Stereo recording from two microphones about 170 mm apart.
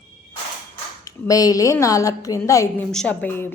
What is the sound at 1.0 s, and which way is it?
A woman's voice, 20° left (ahead or behind).